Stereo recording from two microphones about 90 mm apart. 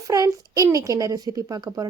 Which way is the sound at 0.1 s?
40° right (ahead or behind).